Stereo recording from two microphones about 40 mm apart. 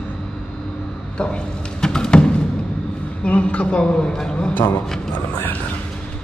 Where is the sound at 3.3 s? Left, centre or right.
Left; by 5.1 s centre.